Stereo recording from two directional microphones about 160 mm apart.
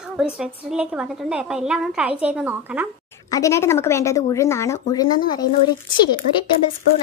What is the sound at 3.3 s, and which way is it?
Speech, 20° left (ahead or behind).